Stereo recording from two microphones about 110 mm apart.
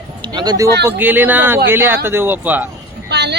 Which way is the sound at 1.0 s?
15° right (ahead or behind).